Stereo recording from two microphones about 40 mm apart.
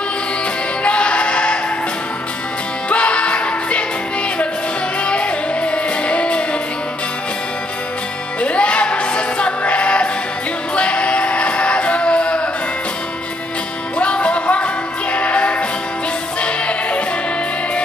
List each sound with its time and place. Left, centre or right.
0.8 s music: left
2.9 s music: left
5.0 s music: left
8.4 s music: left
14.1 s music: left